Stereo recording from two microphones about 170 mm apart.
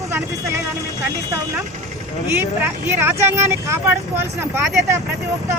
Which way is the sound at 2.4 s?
15° right (ahead or behind).